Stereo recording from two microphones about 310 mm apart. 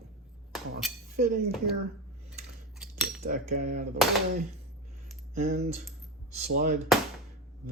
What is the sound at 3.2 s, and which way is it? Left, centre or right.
Speech, right.